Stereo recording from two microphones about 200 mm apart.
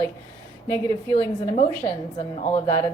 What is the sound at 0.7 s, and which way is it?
Speech, 15° left (ahead or behind).